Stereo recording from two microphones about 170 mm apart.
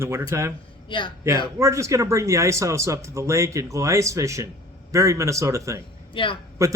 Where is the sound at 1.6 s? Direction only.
15° right (ahead or behind).